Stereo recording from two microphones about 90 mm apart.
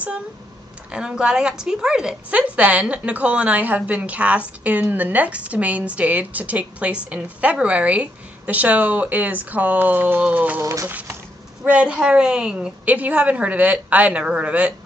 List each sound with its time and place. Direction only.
0.9 s a woman's voice: 10° right (ahead or behind)
10.6 s a sound: 35° right (ahead or behind)
10.9 s a woman's voice: 20° right (ahead or behind)